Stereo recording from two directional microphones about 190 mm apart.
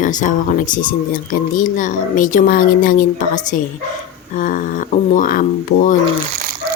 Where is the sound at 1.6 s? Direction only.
45° left (ahead or behind).